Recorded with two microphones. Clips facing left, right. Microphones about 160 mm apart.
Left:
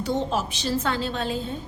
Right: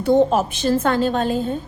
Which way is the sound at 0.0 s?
50° right (ahead or behind).